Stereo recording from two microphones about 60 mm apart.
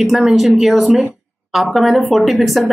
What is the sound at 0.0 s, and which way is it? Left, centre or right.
Speech, centre.